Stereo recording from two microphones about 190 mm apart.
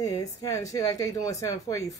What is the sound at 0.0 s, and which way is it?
Speech, 20° left (ahead or behind).